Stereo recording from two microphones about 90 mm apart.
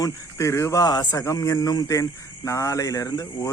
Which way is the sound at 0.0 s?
35° left (ahead or behind).